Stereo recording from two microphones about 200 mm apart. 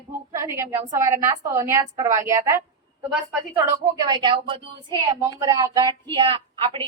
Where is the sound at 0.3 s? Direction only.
15° right (ahead or behind).